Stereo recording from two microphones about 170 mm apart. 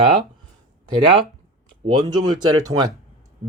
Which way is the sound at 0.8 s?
30° right (ahead or behind).